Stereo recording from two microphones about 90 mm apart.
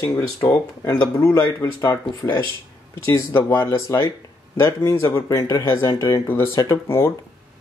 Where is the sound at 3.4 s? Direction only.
25° left (ahead or behind).